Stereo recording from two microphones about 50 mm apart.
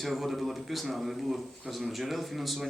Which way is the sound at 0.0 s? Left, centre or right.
Centre.